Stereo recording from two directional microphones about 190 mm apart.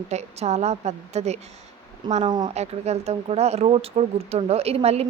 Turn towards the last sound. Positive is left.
turn(degrees=-35)  # may be behind; listen again after turning